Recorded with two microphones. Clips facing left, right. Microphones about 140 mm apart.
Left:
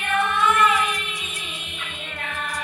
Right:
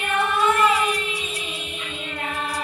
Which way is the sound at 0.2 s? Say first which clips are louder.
Right 1 dB; 35° right (ahead or behind).